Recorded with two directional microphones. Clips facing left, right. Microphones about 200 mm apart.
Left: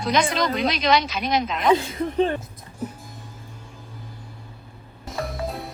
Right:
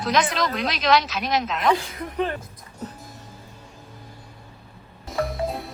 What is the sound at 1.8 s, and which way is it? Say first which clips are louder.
Speech: left 5 dB; 25° left (ahead or behind).